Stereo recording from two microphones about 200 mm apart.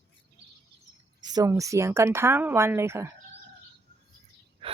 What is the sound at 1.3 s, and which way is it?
Speech, 15° right (ahead or behind).